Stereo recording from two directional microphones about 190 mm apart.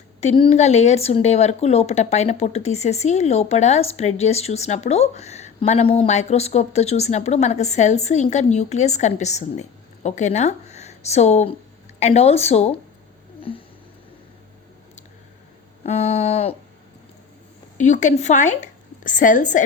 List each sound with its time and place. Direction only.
0.2 s speech: 30° left (ahead or behind)
15.8 s speech: 35° left (ahead or behind)
17.7 s a woman's voice: 40° left (ahead or behind)